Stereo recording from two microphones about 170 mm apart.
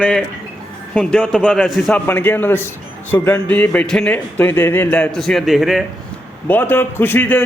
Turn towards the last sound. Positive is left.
turn(degrees=10)  # may be behind; listen again after turning